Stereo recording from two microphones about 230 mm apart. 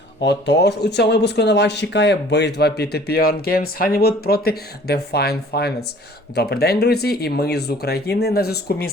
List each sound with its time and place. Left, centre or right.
0.2 s speech: left